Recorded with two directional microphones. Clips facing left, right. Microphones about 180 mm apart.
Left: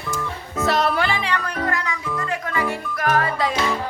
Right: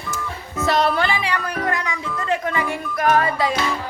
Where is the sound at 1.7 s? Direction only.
20° right (ahead or behind).